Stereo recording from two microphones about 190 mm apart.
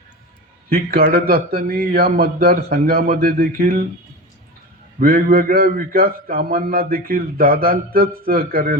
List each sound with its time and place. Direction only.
0.7 s a man's voice: 50° right (ahead or behind)
4.9 s a man's voice: 50° right (ahead or behind)